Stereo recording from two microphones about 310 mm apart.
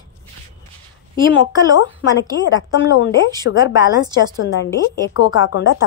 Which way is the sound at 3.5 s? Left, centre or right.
Left.